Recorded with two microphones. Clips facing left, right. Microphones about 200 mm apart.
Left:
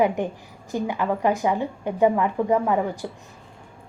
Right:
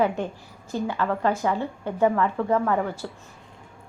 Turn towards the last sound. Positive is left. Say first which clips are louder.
# left 2 dB
turn(degrees=15)  # may be behind; listen again after turning